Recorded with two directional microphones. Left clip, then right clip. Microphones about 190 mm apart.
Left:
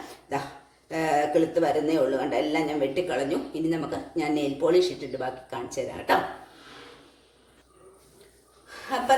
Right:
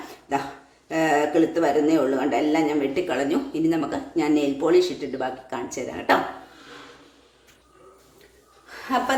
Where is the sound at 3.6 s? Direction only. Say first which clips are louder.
Right 5 dB; 40° right (ahead or behind).